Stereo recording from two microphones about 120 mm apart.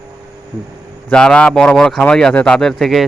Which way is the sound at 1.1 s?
5° left (ahead or behind).